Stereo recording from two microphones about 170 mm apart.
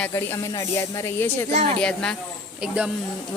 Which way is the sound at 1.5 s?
45° right (ahead or behind).